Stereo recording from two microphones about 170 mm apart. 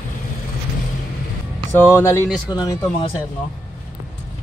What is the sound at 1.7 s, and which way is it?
Speech, 15° left (ahead or behind).